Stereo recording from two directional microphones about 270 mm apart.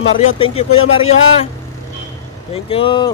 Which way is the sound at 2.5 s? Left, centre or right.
Centre.